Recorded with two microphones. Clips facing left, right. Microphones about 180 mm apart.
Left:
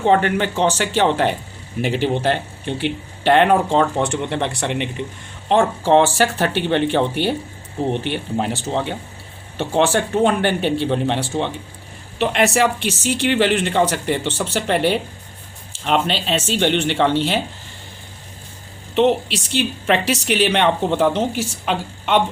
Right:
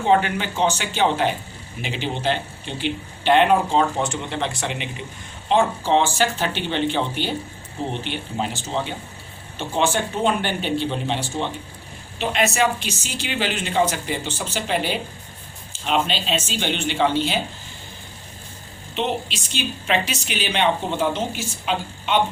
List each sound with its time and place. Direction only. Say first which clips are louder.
0.2 s speech: left 4 dB; 65° left (ahead or behind)
1.9 s speech: left 5 dB; 55° left (ahead or behind)
18.9 s speech: left 9 dB; 70° left (ahead or behind)